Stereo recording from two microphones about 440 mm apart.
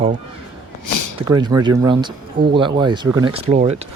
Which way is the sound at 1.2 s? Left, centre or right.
Centre.